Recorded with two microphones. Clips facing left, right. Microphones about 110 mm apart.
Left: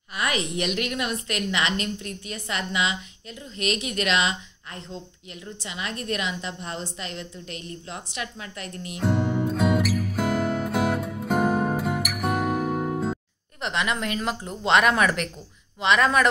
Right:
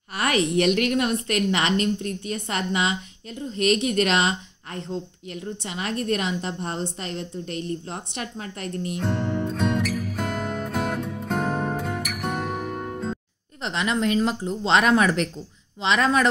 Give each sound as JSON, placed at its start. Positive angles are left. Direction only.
{"t": 0.7, "sound": "a woman's voice", "side_deg": -40}
{"t": 8.9, "sound": "music", "side_deg": 5}
{"t": 13.6, "sound": "a woman's voice", "side_deg": -35}